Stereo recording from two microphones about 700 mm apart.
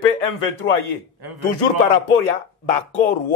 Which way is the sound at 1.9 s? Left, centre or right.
Left.